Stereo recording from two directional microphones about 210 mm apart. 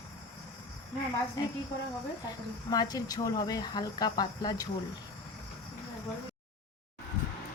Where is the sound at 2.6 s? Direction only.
20° left (ahead or behind).